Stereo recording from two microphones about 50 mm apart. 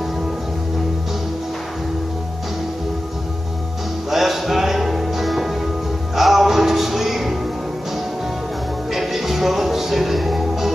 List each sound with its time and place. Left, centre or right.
4.1 s music: centre
8.9 s music: centre